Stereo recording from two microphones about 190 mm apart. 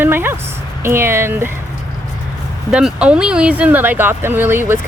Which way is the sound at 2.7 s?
5° right (ahead or behind).